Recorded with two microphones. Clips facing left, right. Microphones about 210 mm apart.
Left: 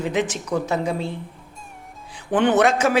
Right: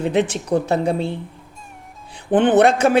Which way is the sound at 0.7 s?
30° right (ahead or behind).